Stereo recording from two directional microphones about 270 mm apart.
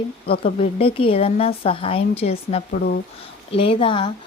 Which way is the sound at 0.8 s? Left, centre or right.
Centre.